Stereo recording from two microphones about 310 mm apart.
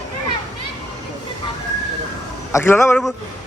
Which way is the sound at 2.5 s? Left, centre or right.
Centre.